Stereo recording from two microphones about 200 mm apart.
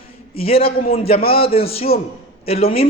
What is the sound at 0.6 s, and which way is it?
Speech, 50° left (ahead or behind).